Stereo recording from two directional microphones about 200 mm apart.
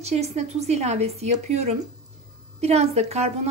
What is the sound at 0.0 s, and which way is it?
A woman's voice, 30° right (ahead or behind).